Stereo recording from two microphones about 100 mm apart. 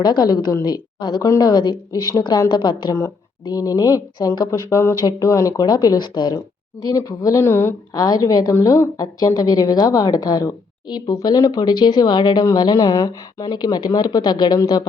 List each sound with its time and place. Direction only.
0.0 s a woman's voice: 45° left (ahead or behind)
3.4 s a woman's voice: 35° left (ahead or behind)
7.9 s a woman's voice: 40° left (ahead or behind)